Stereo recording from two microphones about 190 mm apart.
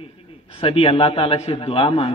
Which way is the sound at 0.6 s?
30° left (ahead or behind).